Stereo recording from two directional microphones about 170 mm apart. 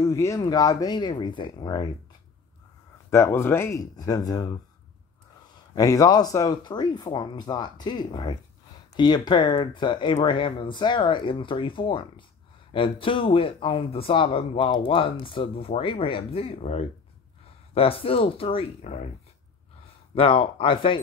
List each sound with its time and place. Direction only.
0.0 s speech: 15° left (ahead or behind)
3.1 s speech: 15° left (ahead or behind)
5.8 s speech: 20° left (ahead or behind); by 19.0 s 40° left (ahead or behind)
20.2 s speech: 30° left (ahead or behind)